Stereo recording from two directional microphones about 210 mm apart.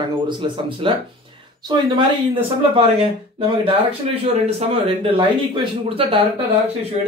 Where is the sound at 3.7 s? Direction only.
25° right (ahead or behind).